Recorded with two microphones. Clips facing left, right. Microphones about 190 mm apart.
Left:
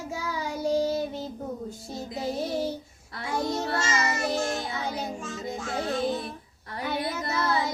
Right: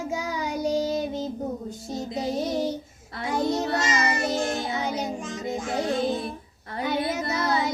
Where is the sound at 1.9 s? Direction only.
20° right (ahead or behind).